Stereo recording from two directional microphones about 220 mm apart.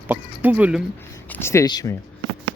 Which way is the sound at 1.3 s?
10° left (ahead or behind).